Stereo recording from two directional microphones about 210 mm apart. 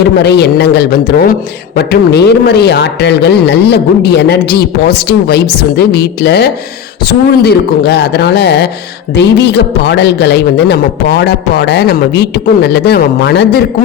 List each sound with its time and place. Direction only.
0.3 s speech: 55° left (ahead or behind)